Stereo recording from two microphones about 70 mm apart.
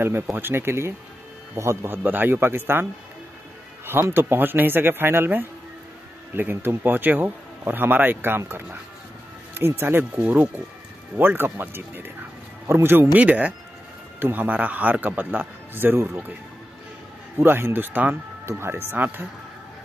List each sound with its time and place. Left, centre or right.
0.4 s speech: right
2.0 s speech: right
17.4 s speech: right